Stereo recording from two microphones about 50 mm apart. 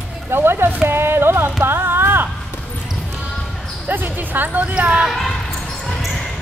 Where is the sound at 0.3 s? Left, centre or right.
Right.